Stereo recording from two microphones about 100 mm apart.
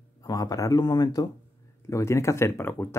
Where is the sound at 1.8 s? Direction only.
30° left (ahead or behind).